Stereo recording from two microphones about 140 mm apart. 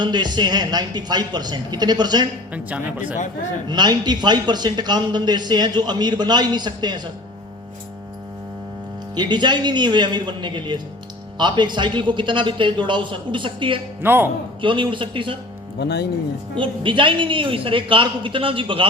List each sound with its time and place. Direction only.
0.0 s a man's voice: 30° right (ahead or behind)
2.5 s a man's voice: 10° right (ahead or behind)
3.7 s a man's voice: 30° right (ahead or behind)
9.1 s a man's voice: 30° right (ahead or behind)
14.0 s a man's voice: 15° right (ahead or behind)
14.6 s a man's voice: 35° right (ahead or behind)
16.6 s a man's voice: 35° right (ahead or behind)